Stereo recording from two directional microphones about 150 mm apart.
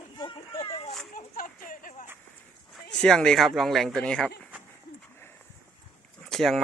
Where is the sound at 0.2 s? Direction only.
35° left (ahead or behind).